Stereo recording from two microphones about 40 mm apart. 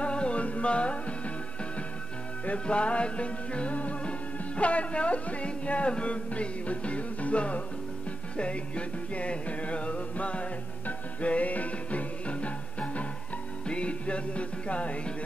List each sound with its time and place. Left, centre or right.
0.0 s music: left
2.4 s music: left